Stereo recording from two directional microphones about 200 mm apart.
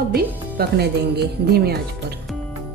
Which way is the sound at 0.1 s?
55° right (ahead or behind).